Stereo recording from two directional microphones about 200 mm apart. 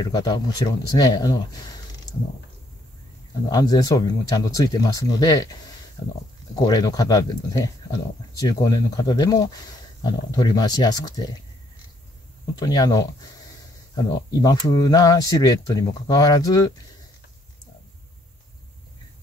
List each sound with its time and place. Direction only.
0.0 s speech: 20° left (ahead or behind)
3.5 s speech: 20° left (ahead or behind)
12.5 s speech: 20° left (ahead or behind)